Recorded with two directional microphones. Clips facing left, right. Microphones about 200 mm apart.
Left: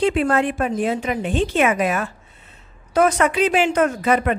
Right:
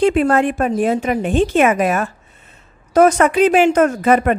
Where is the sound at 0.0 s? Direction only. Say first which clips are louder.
Right 4 dB; 45° right (ahead or behind).